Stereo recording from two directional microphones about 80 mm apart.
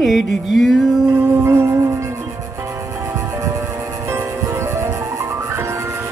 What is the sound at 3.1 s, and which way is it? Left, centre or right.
Music, right.